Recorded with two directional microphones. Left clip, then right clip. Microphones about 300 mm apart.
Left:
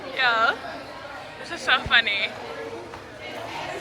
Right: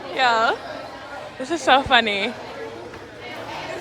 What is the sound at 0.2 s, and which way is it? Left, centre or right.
A woman's voice, centre.